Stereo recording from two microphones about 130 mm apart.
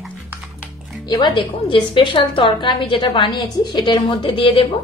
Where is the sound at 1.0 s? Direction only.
35° left (ahead or behind).